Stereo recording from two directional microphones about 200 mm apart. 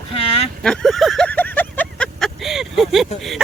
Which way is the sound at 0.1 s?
30° left (ahead or behind).